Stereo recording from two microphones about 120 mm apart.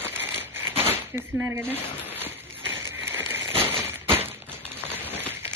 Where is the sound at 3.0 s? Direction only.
20° right (ahead or behind).